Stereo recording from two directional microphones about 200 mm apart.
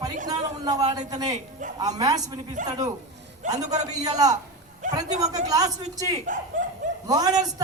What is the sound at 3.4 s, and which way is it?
Speech, 40° right (ahead or behind).